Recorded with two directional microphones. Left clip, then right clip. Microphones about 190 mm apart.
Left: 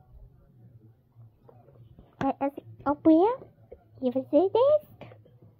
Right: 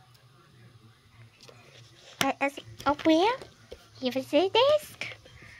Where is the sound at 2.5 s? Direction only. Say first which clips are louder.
Right 1 dB; centre (ahead or behind).